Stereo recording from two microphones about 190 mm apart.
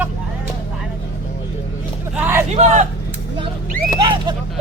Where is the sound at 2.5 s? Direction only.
40° right (ahead or behind).